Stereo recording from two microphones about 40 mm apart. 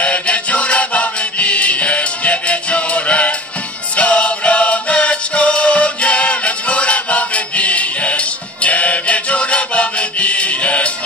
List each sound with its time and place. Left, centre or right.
0.0 s music: left